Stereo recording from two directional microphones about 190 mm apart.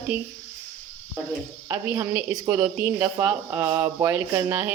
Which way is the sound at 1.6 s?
15° right (ahead or behind).